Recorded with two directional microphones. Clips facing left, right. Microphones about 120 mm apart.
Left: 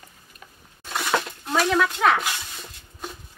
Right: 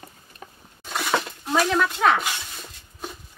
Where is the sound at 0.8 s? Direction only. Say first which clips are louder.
Even; centre (ahead or behind).